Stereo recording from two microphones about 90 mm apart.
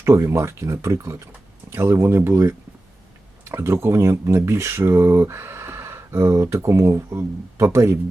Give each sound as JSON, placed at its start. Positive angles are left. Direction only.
{"t": 0.0, "sound": "speech", "side_deg": -30}